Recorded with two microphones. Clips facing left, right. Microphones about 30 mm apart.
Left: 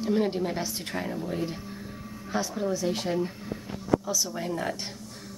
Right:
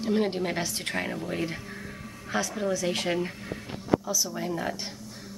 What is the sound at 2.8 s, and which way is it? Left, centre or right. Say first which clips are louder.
Speech: right 1 dB; right.